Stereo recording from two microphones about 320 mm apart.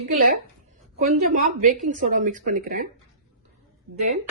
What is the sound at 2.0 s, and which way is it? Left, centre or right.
Speech, right.